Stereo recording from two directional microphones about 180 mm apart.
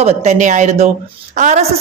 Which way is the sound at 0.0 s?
40° right (ahead or behind).